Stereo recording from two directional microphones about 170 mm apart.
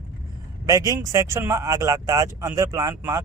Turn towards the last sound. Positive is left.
turn(degrees=-15)  # may be behind; listen again after turning